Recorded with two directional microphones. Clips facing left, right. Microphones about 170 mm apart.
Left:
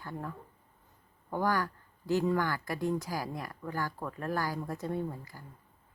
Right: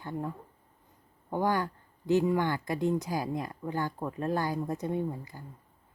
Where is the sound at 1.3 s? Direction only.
20° right (ahead or behind).